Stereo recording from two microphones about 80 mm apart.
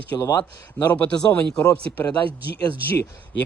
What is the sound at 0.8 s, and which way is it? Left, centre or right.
Speech, left.